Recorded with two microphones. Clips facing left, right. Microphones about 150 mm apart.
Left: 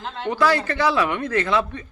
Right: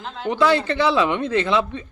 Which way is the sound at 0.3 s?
20° right (ahead or behind).